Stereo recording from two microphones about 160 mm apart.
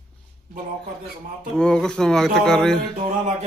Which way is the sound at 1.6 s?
5° left (ahead or behind).